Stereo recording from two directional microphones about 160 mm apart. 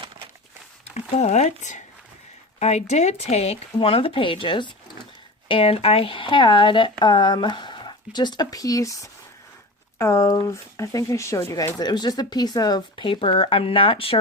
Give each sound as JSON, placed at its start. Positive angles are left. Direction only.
{"t": 0.9, "sound": "speech", "side_deg": 45}